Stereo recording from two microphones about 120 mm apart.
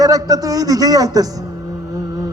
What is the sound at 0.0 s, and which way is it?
A man's voice, 30° right (ahead or behind).